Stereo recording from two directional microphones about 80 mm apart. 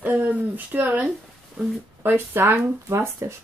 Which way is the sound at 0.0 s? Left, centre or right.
Right.